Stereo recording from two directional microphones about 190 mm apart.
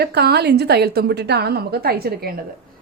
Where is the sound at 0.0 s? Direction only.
60° right (ahead or behind).